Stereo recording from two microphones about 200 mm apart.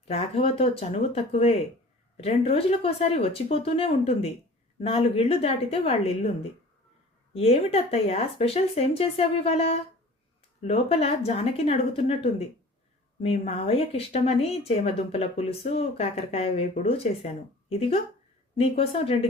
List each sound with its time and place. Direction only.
0.1 s speech: 30° left (ahead or behind)
7.3 s speech: 30° left (ahead or behind)